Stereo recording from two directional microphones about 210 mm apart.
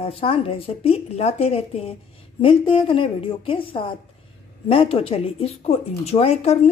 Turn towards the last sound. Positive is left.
turn(degrees=30)  # may be behind; listen again after turning